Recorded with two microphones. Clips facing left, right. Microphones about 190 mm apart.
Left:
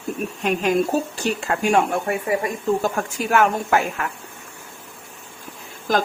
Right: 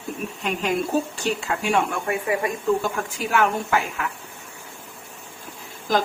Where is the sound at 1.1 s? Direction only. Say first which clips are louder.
Left 2 dB; 45° left (ahead or behind).